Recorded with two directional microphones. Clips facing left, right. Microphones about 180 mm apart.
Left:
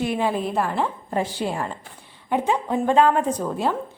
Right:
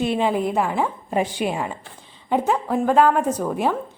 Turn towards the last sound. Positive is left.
turn(degrees=-15)  # may be behind; listen again after turning